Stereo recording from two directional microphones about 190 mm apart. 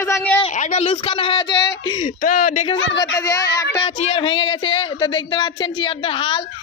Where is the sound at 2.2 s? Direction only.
45° left (ahead or behind).